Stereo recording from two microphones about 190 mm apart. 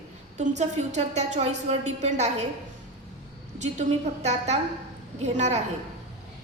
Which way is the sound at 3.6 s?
35° right (ahead or behind).